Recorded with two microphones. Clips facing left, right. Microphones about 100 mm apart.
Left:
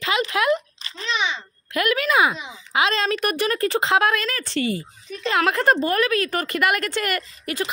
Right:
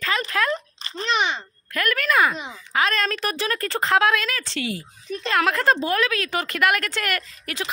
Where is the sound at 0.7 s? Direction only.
45° right (ahead or behind).